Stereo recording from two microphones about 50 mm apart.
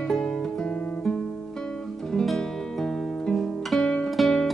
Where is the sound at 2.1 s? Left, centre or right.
Centre.